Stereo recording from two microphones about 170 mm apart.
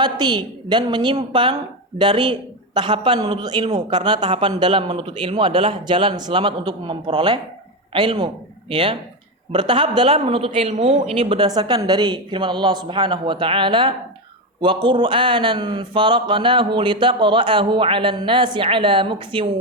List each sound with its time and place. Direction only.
0.0 s speech: 25° right (ahead or behind)